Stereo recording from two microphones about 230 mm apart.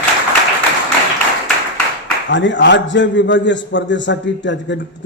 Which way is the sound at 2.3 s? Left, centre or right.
Left.